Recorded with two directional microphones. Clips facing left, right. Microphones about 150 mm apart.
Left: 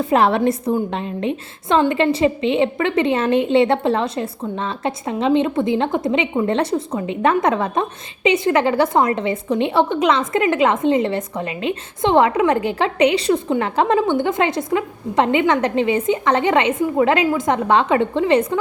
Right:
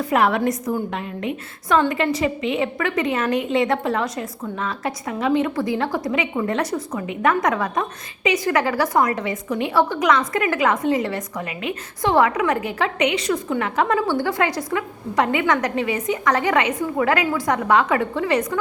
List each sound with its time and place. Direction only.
0.0 s a woman's voice: 30° left (ahead or behind)